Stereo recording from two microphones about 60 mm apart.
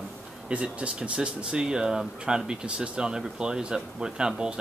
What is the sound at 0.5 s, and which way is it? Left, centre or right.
Speech, centre.